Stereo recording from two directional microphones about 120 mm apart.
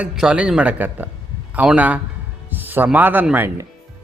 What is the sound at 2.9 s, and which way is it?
Speech, 15° right (ahead or behind).